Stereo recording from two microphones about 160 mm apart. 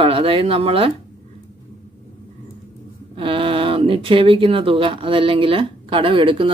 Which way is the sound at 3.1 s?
35° right (ahead or behind).